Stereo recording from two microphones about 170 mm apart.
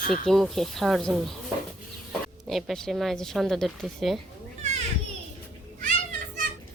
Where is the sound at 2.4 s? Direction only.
Centre (ahead or behind).